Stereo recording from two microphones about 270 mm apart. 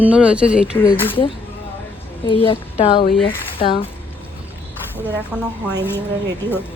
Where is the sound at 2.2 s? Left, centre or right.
Centre.